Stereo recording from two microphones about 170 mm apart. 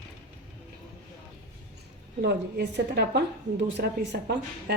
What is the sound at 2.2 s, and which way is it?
A woman's voice, 75° right (ahead or behind).